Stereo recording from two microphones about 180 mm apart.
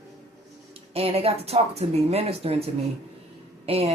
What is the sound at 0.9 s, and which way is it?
Speech, 35° right (ahead or behind).